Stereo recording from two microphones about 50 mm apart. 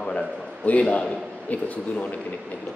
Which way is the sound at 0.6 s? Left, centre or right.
Left.